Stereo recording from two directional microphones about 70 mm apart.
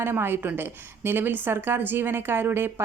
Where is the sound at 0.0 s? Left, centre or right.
Right.